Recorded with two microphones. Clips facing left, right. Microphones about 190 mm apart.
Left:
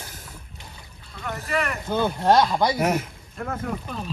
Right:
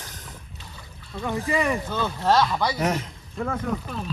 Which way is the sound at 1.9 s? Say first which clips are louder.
Left 5 dB; 15° left (ahead or behind).